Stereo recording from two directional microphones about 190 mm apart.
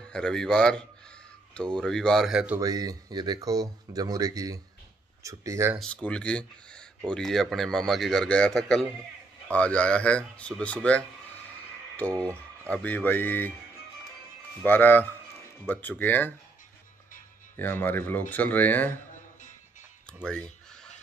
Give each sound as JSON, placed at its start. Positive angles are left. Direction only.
{"t": 0.1, "sound": "a man's voice", "side_deg": 5}
{"t": 2.6, "sound": "speech", "side_deg": -20}
{"t": 5.8, "sound": "a man's voice", "side_deg": 5}
{"t": 12.4, "sound": "a man's voice", "side_deg": 5}
{"t": 14.6, "sound": "speech", "side_deg": 10}
{"t": 17.6, "sound": "speech", "side_deg": 10}
{"t": 20.2, "sound": "fowl", "side_deg": 5}